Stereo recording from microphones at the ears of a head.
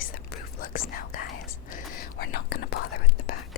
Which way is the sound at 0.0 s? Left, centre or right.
Left.